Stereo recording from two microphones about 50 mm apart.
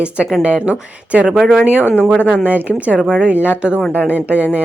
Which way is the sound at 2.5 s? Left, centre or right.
Right.